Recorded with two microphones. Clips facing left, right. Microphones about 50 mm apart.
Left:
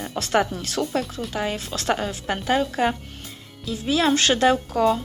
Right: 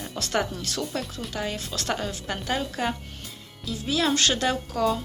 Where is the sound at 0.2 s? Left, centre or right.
Left.